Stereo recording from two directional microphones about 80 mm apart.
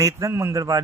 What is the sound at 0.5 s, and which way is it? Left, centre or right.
Speech, right.